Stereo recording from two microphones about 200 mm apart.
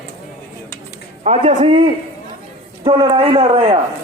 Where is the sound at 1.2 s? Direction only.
35° right (ahead or behind).